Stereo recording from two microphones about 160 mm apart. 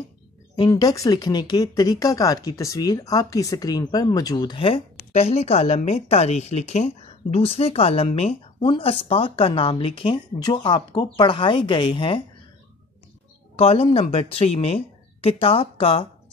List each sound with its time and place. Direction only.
0.7 s speech: 20° left (ahead or behind)
13.6 s speech: 40° left (ahead or behind)